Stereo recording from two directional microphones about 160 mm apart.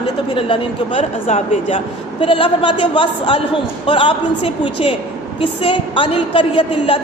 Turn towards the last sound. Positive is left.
turn(degrees=35)  # may be behind; listen again after turning